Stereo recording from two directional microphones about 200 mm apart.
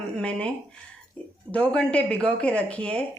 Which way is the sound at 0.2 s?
5° left (ahead or behind).